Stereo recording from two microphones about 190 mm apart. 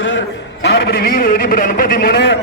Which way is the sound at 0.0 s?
80° left.